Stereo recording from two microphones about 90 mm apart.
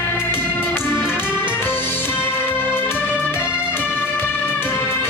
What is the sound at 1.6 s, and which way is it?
Music, 20° left (ahead or behind).